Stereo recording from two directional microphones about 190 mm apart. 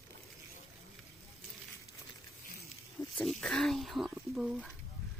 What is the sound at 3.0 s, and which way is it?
Pig, 15° left (ahead or behind).